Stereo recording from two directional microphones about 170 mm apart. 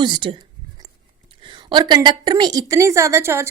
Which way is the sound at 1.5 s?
25° right (ahead or behind).